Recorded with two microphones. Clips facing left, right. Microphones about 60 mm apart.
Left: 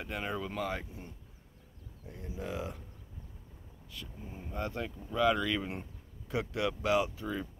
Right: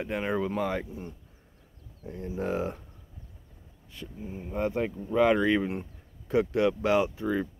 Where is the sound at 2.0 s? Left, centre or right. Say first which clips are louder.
Right 9 dB; right.